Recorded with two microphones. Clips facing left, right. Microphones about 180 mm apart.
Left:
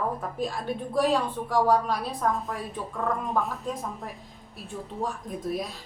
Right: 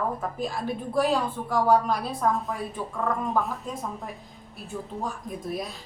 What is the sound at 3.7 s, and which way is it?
Speech, centre (ahead or behind).